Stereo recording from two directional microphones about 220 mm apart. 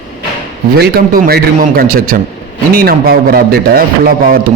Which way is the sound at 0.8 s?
45° right (ahead or behind).